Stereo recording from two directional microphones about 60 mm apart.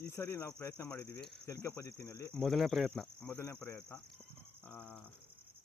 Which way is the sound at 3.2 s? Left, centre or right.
Left.